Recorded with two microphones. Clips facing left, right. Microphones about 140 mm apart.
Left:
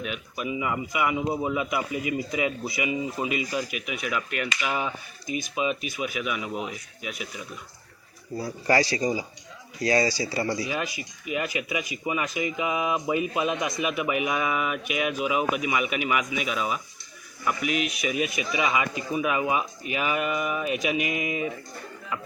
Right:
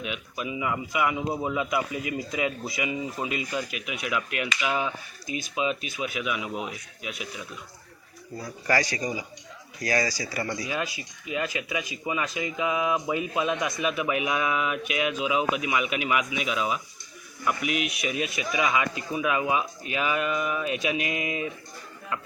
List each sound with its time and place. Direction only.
0.0 s speech: centre (ahead or behind)
8.4 s speech: 30° left (ahead or behind)
10.9 s speech: 10° left (ahead or behind)